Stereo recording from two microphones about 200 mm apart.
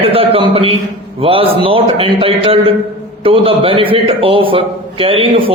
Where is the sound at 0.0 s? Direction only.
30° right (ahead or behind).